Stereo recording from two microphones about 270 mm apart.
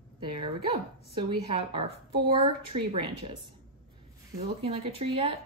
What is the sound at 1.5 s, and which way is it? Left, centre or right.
Speech, right.